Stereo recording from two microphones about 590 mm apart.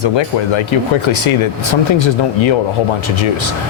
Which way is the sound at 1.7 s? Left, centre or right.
Left.